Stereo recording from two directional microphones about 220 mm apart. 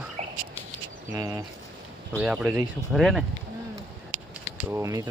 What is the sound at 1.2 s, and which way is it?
Speech, 15° right (ahead or behind).